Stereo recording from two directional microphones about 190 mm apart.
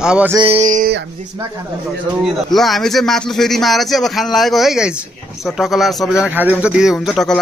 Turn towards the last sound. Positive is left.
turn(degrees=0)  # may be behind; listen again after turning